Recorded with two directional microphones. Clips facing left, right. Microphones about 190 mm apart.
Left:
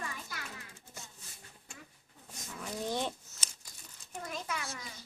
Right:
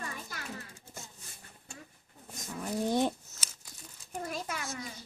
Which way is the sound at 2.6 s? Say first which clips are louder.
Right 6 dB; 45° right (ahead or behind).